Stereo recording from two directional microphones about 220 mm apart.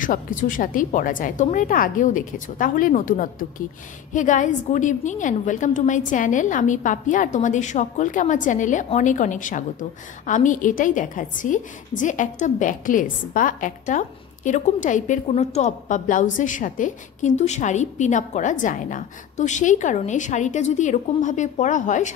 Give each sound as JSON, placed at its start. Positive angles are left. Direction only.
{"t": 0.0, "sound": "a woman's voice", "side_deg": 35}